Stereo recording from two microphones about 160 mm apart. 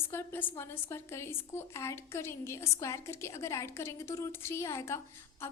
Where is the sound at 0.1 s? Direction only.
15° left (ahead or behind).